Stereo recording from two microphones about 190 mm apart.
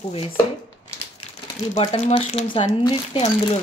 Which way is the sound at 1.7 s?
35° left (ahead or behind).